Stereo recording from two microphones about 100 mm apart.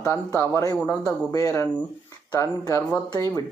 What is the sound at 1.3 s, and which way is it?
Speech, 35° left (ahead or behind).